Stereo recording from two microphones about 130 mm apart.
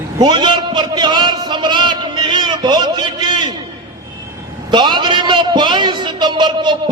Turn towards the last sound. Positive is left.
turn(degrees=-35)  # may be behind; listen again after turning